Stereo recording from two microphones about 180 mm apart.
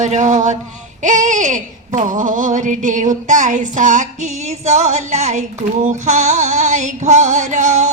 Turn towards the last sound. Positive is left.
turn(degrees=-40)  # may be behind; listen again after turning